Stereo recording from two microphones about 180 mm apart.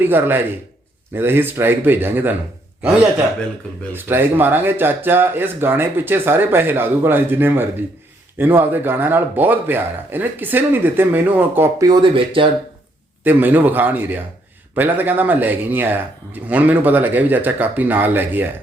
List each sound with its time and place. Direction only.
0.0 s speech: 10° right (ahead or behind)
3.9 s speech: 10° right (ahead or behind); by 12.5 s 30° right (ahead or behind)
13.2 s speech: 10° right (ahead or behind)